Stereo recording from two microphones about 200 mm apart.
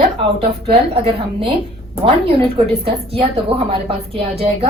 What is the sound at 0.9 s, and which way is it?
Speech, 25° right (ahead or behind).